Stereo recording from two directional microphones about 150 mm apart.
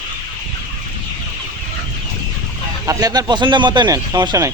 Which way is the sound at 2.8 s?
25° right (ahead or behind).